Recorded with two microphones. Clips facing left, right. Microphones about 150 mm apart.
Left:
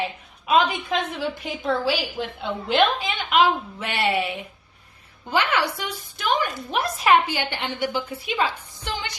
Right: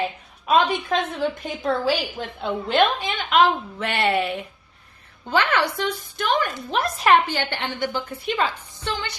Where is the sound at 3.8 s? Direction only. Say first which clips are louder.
Right 2 dB; 50° right (ahead or behind).